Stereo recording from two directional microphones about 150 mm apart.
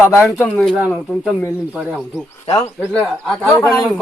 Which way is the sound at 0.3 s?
10° left (ahead or behind).